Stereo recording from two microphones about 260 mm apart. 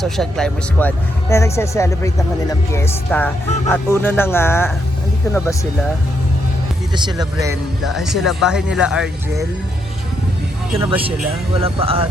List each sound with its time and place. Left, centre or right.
0.0 s speech: centre
6.9 s speech: centre
7.9 s speech: centre
10.8 s speech: centre
11.6 s speech: right